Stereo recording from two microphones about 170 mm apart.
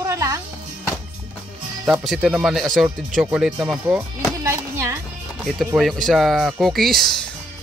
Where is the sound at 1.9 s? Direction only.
5° right (ahead or behind).